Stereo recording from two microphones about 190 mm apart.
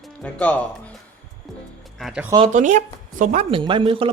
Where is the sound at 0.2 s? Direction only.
10° left (ahead or behind).